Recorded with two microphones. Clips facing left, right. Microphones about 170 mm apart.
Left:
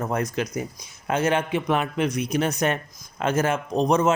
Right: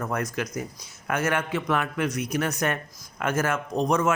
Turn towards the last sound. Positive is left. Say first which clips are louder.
# left 3 dB
turn(degrees=20)  # may be behind; listen again after turning